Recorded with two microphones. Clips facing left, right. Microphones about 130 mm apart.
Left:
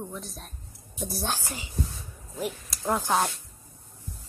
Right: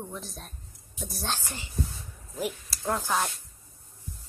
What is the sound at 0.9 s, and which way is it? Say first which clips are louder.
Speech: left 5 dB; 30° left (ahead or behind).